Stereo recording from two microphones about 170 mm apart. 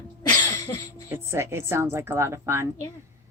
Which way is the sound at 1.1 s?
15° right (ahead or behind).